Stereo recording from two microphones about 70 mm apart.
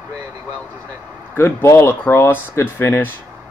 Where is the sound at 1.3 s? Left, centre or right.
Left.